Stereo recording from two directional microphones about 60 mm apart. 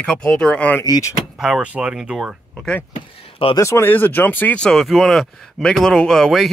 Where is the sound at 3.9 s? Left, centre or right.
Left.